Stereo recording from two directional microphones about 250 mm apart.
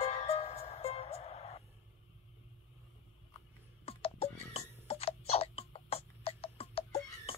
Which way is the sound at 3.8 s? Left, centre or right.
Left.